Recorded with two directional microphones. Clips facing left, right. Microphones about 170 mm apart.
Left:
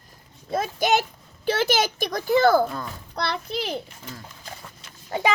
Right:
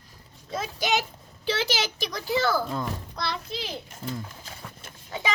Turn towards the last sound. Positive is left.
turn(degrees=50)  # may be behind; listen again after turning